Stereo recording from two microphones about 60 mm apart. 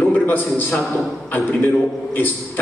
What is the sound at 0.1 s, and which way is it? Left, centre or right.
A man's voice, left.